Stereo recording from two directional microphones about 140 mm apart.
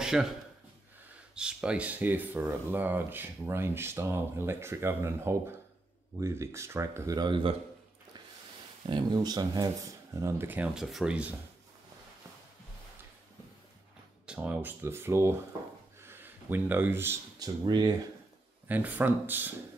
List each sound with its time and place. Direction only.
0.0 s speech: 5° right (ahead or behind)
1.3 s speech: 5° right (ahead or behind); by 7.5 s 35° right (ahead or behind)
8.8 s speech: 35° right (ahead or behind); by 11.3 s 5° right (ahead or behind)
14.2 s speech: 10° right (ahead or behind)
16.0 s a sound: 15° right (ahead or behind)
17.4 s speech: 30° right (ahead or behind)
18.7 s speech: 10° right (ahead or behind)